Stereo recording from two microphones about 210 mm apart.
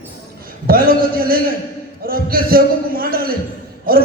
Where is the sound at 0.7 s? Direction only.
45° right (ahead or behind).